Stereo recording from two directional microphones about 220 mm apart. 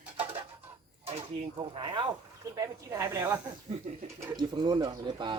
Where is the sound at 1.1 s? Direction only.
25° right (ahead or behind).